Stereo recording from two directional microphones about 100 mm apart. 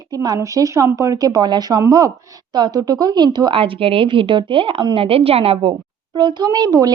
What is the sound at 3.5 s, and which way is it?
A woman's voice, 65° right (ahead or behind).